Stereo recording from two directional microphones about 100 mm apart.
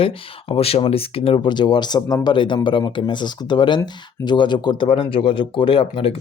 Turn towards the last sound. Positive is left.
turn(degrees=70)  # may be behind; listen again after turning